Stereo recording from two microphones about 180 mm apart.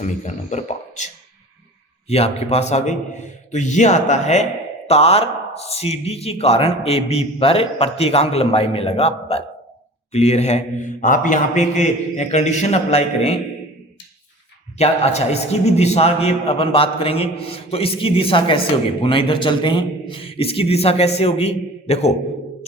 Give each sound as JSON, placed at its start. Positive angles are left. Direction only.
{"t": 0.0, "sound": "speech", "side_deg": 40}
{"t": 14.8, "sound": "speech", "side_deg": 35}